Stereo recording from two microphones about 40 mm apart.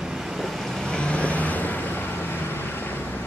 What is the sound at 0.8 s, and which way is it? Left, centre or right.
Vehicle, left.